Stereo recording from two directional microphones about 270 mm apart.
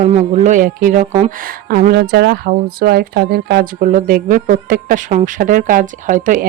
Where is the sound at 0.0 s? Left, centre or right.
Right.